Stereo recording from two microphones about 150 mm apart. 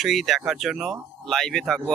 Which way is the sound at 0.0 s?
Centre (ahead or behind).